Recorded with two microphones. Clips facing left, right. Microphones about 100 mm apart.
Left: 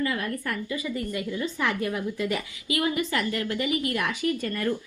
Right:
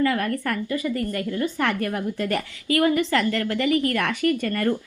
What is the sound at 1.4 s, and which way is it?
Speech, 60° right (ahead or behind).